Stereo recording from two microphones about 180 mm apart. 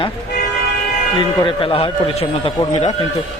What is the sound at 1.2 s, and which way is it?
Speech, 30° left (ahead or behind).